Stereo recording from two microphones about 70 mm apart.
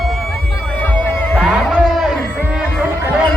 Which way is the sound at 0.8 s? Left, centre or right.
Left.